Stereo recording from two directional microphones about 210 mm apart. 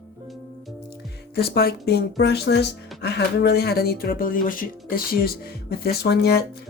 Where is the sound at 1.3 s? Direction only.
50° left (ahead or behind).